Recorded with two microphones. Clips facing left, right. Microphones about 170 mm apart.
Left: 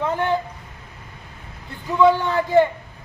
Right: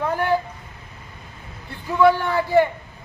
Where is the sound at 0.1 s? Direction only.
20° left (ahead or behind).